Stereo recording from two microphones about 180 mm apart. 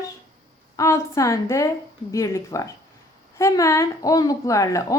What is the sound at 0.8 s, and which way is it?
A woman's voice, 15° left (ahead or behind).